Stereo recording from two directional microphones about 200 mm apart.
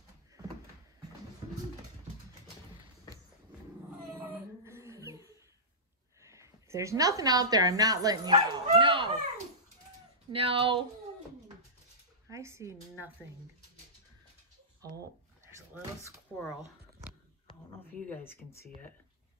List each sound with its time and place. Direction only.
4.3 s a sound: 10° right (ahead or behind)
6.2 s a woman's voice: 15° right (ahead or behind)
10.3 s speech: 25° right (ahead or behind)
12.3 s a woman's voice: 15° right (ahead or behind)
16.3 s speech: 5° left (ahead or behind)
17.7 s speech: 10° left (ahead or behind)